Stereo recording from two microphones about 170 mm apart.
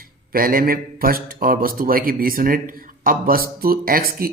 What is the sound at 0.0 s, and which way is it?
A man's voice, 60° right (ahead or behind).